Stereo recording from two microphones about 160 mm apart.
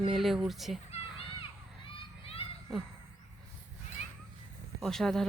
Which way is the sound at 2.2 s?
35° left (ahead or behind).